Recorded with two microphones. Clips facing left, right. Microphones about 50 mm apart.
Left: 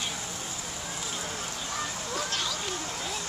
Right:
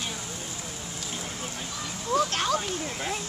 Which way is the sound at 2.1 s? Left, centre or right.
Right.